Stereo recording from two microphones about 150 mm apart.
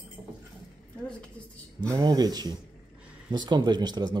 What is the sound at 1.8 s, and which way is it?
Speech, 25° right (ahead or behind).